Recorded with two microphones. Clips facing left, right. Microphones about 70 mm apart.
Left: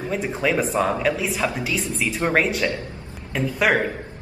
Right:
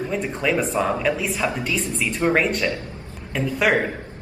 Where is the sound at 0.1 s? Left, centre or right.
Centre.